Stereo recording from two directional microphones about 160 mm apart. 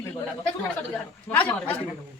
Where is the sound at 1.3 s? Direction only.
10° left (ahead or behind).